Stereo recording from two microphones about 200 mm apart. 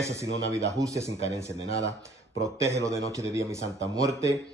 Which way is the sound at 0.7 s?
15° right (ahead or behind).